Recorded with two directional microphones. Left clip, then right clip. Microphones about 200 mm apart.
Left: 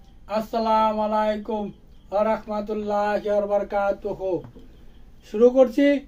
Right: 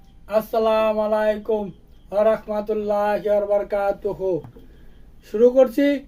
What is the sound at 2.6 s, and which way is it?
Speech, centre (ahead or behind).